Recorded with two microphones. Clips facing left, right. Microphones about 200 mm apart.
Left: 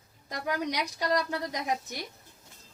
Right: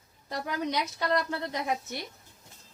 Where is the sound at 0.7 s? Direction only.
15° left (ahead or behind).